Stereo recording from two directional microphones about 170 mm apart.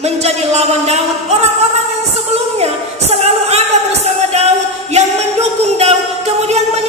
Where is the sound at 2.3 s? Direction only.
40° right (ahead or behind).